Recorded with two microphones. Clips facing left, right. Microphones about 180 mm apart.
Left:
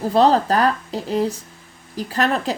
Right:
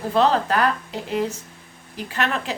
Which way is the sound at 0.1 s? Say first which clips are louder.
Left 3 dB; 35° left (ahead or behind).